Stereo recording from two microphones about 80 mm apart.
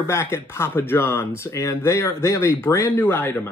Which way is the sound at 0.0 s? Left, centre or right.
Left.